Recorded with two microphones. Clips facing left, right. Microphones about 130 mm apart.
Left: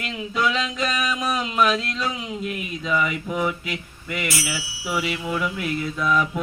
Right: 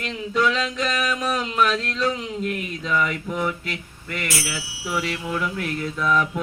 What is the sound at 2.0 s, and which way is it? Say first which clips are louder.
Speech: right 3 dB; 5° left (ahead or behind).